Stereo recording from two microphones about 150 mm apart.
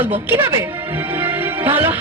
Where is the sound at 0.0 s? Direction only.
15° right (ahead or behind).